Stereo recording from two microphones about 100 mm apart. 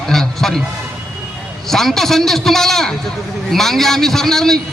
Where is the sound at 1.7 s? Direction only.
5° left (ahead or behind).